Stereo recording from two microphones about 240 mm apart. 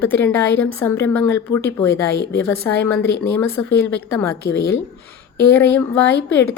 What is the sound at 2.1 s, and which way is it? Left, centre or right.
Speech, left.